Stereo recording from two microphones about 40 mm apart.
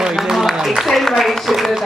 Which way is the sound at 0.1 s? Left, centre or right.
Centre.